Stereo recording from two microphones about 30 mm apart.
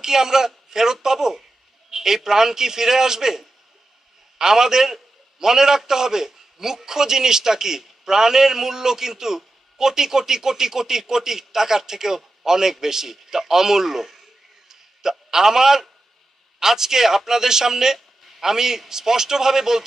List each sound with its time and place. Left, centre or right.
0.0 s a man's voice: centre
14.7 s a sound: centre
16.5 s a man's voice: centre